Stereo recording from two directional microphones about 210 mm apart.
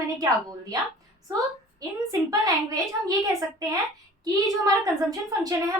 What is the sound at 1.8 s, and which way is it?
A woman's voice, 15° right (ahead or behind).